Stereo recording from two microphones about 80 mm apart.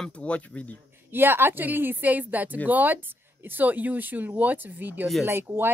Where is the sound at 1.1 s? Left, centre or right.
Right.